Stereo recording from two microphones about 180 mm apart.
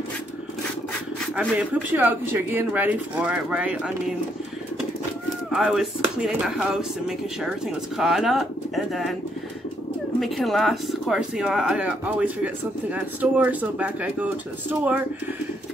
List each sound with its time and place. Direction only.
1.3 s speech: 5° right (ahead or behind)
5.5 s speech: centre (ahead or behind)
10.2 s speech: centre (ahead or behind)